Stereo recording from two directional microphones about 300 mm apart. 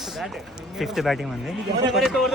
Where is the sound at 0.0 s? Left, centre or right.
Centre.